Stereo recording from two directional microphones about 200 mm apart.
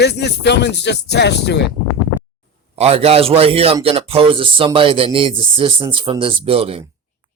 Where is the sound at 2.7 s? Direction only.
30° right (ahead or behind).